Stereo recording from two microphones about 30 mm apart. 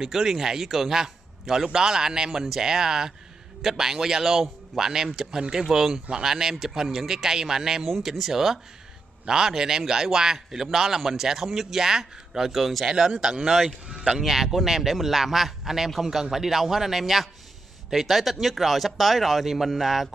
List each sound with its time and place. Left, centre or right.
0.0 s a man's voice: centre
12.8 s a man's voice: right; by 20.1 s centre